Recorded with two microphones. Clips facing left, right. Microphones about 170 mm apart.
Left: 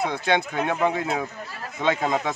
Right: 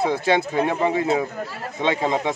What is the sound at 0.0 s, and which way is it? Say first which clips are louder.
Speech: right 3 dB; 30° right (ahead or behind).